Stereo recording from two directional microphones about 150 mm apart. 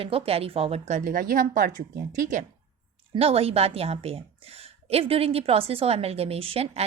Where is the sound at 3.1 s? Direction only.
40° right (ahead or behind).